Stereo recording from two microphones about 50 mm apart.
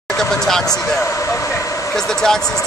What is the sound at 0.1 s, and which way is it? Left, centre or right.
Speech, centre.